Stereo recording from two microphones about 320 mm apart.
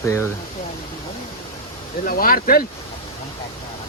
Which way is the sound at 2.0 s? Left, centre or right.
Left.